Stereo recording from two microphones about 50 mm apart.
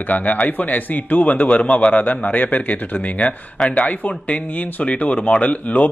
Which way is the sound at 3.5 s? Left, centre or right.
Centre.